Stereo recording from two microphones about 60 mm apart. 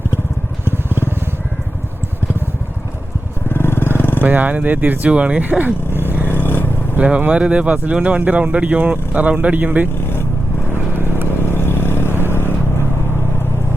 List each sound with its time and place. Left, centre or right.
0.6 s vehicle: right
3.5 s vehicle: left
4.2 s speech: right
6.2 s vehicle: left
6.9 s speech: right
11.5 s vehicle: left